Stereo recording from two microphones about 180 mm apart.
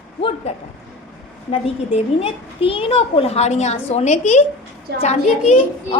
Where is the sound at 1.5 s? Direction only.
30° left (ahead or behind).